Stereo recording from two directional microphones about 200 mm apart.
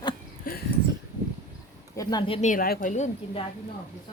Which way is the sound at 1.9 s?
20° left (ahead or behind).